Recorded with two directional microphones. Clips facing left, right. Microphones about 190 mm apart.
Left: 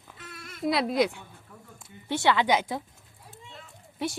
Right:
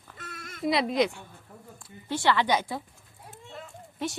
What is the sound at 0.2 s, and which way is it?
Bleat, 50° right (ahead or behind).